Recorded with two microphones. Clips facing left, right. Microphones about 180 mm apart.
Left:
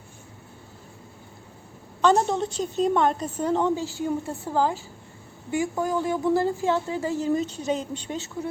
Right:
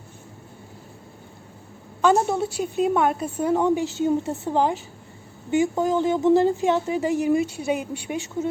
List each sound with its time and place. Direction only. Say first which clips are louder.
2.0 s a woman's voice: right 1 dB; 10° right (ahead or behind)